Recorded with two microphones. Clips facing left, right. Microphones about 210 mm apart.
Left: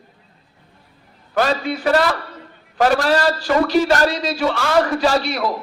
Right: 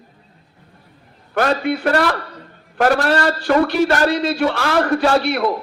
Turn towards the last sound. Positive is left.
turn(degrees=-60)  # may be behind; listen again after turning